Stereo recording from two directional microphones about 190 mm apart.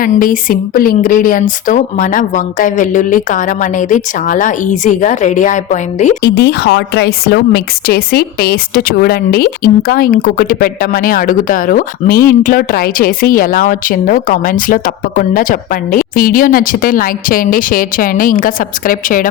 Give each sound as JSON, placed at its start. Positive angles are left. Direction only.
{"t": 0.0, "sound": "a woman's voice", "side_deg": 45}
{"t": 6.2, "sound": "a woman's voice", "side_deg": 60}